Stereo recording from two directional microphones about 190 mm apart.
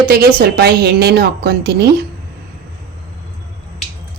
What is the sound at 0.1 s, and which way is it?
A woman's voice, 55° right (ahead or behind).